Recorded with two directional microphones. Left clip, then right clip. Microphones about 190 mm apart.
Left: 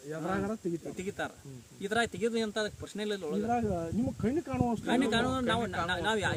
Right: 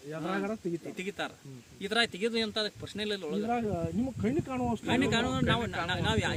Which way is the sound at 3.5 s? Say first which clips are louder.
Even; 15° right (ahead or behind).